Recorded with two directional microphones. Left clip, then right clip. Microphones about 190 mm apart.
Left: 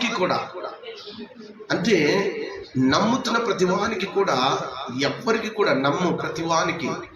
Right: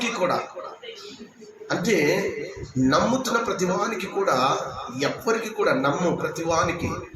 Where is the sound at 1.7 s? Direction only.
30° left (ahead or behind).